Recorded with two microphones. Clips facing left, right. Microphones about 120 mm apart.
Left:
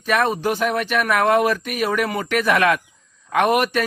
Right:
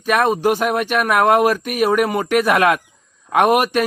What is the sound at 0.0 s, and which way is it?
Speech, 50° right (ahead or behind).